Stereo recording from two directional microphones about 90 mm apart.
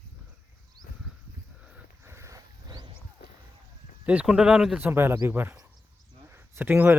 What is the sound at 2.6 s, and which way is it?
Wild animals, 50° right (ahead or behind).